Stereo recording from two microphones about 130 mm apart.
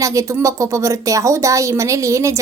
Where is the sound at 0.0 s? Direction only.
25° right (ahead or behind).